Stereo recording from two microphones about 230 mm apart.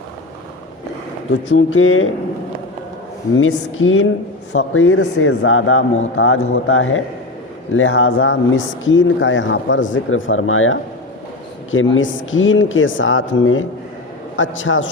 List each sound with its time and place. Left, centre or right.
1.3 s speech: left
3.3 s speech: left